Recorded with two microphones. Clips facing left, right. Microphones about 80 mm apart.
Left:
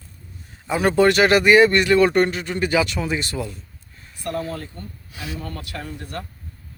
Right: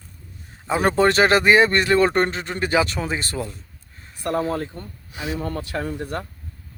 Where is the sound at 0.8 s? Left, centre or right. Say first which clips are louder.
Left 1 dB; right.